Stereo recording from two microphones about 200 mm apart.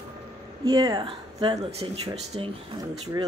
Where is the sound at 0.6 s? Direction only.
20° right (ahead or behind).